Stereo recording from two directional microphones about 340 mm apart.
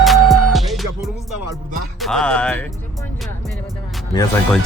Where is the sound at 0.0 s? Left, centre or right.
Centre.